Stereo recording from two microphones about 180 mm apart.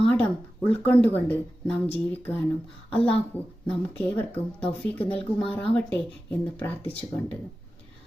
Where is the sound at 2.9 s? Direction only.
30° left (ahead or behind).